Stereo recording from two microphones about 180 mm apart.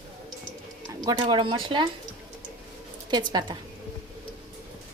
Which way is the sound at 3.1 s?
25° right (ahead or behind).